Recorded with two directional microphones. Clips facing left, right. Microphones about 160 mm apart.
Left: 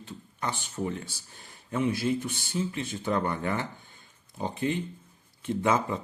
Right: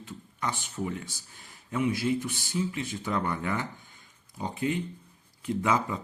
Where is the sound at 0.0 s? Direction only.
30° left (ahead or behind).